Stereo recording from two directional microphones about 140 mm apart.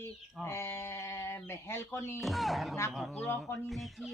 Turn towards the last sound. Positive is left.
turn(degrees=0)  # may be behind; listen again after turning